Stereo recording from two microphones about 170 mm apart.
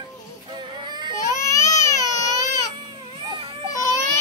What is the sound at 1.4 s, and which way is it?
Baby cry, 20° left (ahead or behind).